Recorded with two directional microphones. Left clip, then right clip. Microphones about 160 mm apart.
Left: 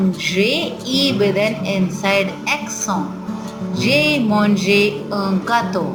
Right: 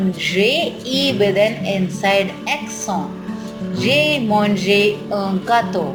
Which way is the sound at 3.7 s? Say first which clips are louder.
Even; 20° right (ahead or behind).